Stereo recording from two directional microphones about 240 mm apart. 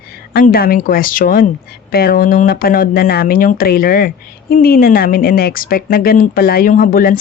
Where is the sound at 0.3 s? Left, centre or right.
Left.